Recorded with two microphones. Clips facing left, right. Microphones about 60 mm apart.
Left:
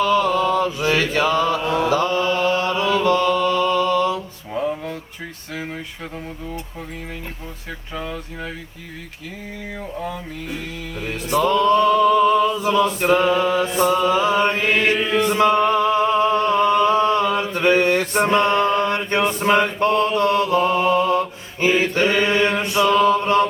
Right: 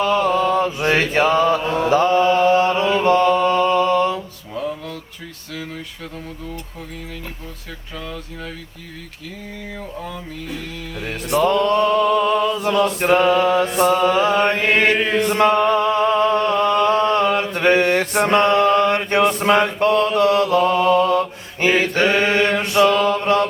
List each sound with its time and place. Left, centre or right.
0.0 s mantra: right
4.5 s mantra: left
7.9 s speech: centre
10.0 s music: centre
11.0 s mantra: right
15.3 s music: right
19.1 s mantra: right